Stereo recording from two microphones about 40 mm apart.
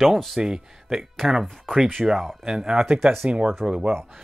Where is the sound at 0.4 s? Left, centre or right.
Centre.